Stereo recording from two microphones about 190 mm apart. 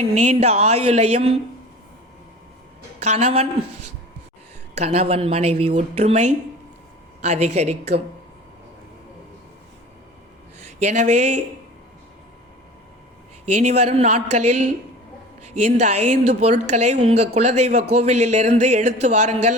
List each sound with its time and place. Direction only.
0.0 s speech: 35° right (ahead or behind)
3.0 s speech: 35° right (ahead or behind)
4.8 s speech: 35° right (ahead or behind)
10.8 s speech: 40° right (ahead or behind)
13.5 s speech: 35° right (ahead or behind)